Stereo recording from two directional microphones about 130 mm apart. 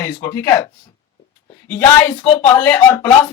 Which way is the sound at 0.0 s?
20° left (ahead or behind).